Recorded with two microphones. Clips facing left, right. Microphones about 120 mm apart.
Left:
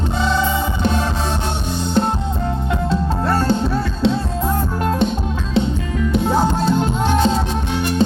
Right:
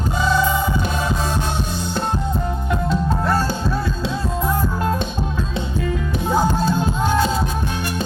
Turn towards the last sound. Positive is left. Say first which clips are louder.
# left 2 dB
turn(degrees=20)  # may be behind; listen again after turning